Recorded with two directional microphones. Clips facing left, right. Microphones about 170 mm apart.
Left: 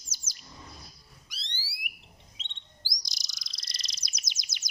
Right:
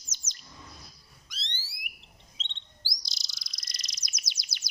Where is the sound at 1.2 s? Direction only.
10° left (ahead or behind).